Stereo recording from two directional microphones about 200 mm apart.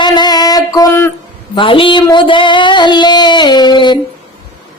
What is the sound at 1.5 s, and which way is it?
A man's voice, 25° left (ahead or behind).